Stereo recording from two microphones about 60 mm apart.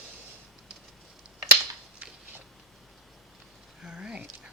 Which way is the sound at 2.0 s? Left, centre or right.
Right.